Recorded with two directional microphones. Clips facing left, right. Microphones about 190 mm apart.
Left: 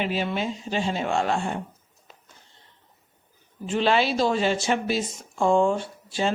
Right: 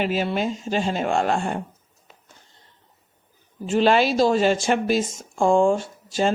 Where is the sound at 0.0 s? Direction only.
40° right (ahead or behind).